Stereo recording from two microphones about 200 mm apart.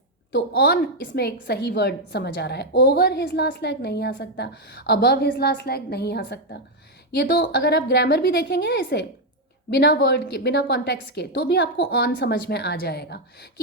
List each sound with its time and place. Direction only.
0.3 s a woman's voice: 55° left (ahead or behind)